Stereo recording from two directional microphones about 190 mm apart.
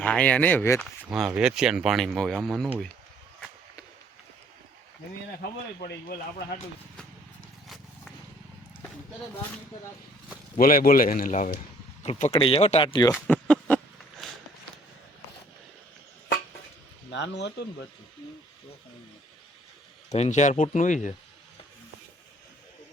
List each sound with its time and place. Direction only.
0.0 s speech: 5° left (ahead or behind)
1.0 s speech: 5° right (ahead or behind)
5.4 s speech: 50° left (ahead or behind)
10.6 s speech: 50° left (ahead or behind)
12.3 s speech: 30° left (ahead or behind)
13.2 s a sound: 5° left (ahead or behind)
17.1 s speech: 65° left (ahead or behind)
20.1 s speech: 35° left (ahead or behind)